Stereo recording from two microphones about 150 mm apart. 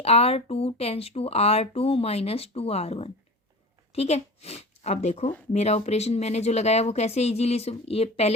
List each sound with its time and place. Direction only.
0.0 s speech: 40° left (ahead or behind)